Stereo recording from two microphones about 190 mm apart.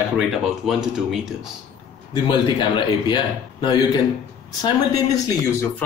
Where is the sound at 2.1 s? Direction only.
25° left (ahead or behind).